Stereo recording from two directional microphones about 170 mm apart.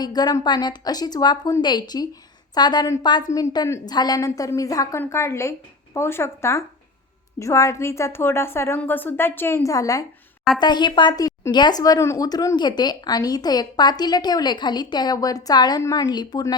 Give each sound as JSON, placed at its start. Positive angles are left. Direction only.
{"t": 0.0, "sound": "a woman's voice", "side_deg": 25}